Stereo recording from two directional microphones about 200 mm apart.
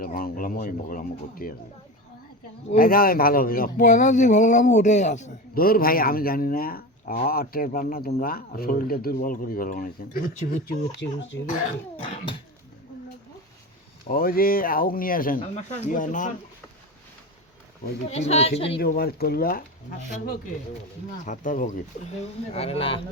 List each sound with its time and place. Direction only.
0.0 s speech: 45° left (ahead or behind)
2.7 s speech: 45° left (ahead or behind)
11.0 s speech: 65° left (ahead or behind)
14.1 s speech: 50° left (ahead or behind)
18.1 s speech: 30° left (ahead or behind)
18.8 s speech: 50° left (ahead or behind)
21.2 s speech: 40° left (ahead or behind)
22.5 s speech: 30° left (ahead or behind)